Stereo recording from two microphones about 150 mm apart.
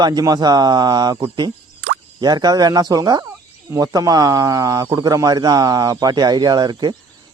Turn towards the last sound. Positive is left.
turn(degrees=-30)  # may be behind; listen again after turning